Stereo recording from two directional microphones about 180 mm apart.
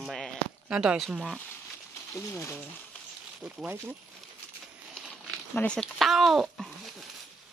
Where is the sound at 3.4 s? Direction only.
Centre (ahead or behind).